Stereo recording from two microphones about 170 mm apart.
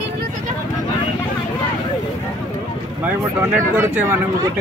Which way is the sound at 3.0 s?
15° right (ahead or behind).